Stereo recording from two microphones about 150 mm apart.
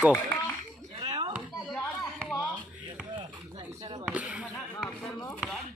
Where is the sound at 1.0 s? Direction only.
30° right (ahead or behind).